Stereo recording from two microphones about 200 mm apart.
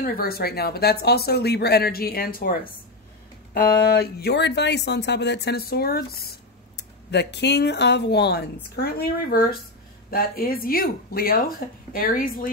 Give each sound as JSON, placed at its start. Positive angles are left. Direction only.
{"t": 0.0, "sound": "speech", "side_deg": 45}